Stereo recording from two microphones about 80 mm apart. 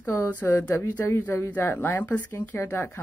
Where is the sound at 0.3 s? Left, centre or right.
Left.